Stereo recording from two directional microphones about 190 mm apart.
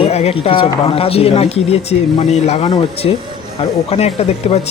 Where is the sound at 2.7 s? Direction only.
25° left (ahead or behind).